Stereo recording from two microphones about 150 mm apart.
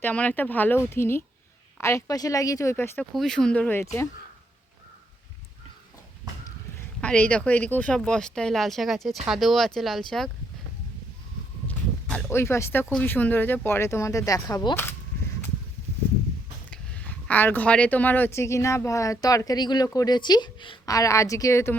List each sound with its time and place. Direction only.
0.0 s speech: 10° left (ahead or behind)
3.2 s speech: 5° left (ahead or behind)
7.0 s speech: 10° left (ahead or behind)
12.1 s speech: 15° left (ahead or behind)
16.6 s speech: 10° left (ahead or behind)